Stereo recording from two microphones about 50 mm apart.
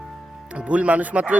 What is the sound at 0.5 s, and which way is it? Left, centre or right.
Speech, right.